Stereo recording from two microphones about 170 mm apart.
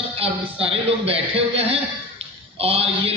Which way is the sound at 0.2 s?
35° right (ahead or behind).